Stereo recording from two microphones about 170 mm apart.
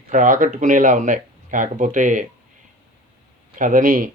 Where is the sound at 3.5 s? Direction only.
50° right (ahead or behind).